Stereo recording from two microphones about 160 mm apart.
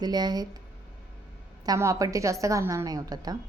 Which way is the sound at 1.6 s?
20° right (ahead or behind).